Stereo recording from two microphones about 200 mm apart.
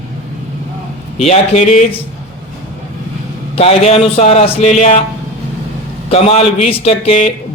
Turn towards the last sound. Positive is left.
turn(degrees=30)  # may be behind; listen again after turning